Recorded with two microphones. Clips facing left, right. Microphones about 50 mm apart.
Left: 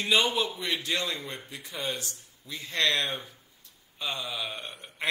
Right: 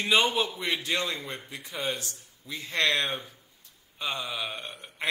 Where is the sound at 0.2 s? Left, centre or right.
Right.